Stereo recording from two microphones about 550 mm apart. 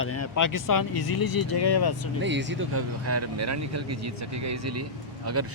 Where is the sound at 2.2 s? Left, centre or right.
Centre.